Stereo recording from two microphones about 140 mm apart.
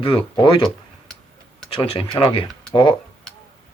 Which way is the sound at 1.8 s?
40° left (ahead or behind).